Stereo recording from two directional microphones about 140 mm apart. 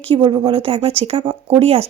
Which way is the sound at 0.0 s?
40° right (ahead or behind).